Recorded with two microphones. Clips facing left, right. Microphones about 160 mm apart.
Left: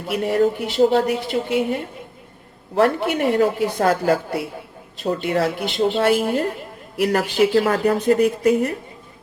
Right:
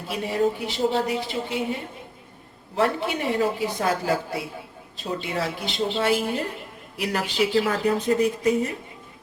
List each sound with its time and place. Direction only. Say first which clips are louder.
0.1 s a woman's voice: left 5 dB; 60° left (ahead or behind)